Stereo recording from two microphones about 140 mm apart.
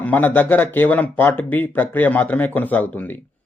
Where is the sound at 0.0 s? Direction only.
10° left (ahead or behind).